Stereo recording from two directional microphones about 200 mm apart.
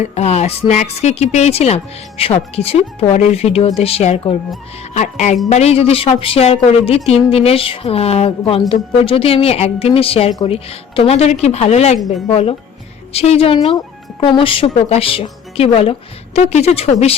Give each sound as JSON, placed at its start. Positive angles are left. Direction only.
{"t": 0.0, "sound": "speech", "side_deg": 30}